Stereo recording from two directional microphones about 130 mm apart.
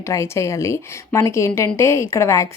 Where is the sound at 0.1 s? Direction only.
20° left (ahead or behind).